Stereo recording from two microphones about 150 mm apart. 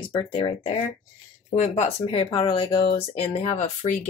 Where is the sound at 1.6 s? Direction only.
50° left (ahead or behind).